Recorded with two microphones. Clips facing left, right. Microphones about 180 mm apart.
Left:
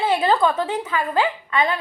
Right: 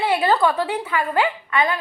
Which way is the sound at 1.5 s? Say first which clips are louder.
Even; 25° left (ahead or behind).